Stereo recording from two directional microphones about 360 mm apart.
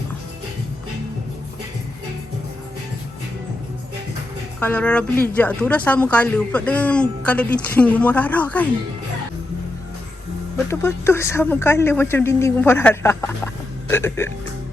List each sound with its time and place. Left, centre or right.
4.6 s speech: centre
10.7 s speech: centre